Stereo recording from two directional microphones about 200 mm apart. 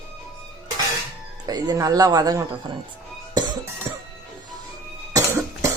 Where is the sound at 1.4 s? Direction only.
20° right (ahead or behind).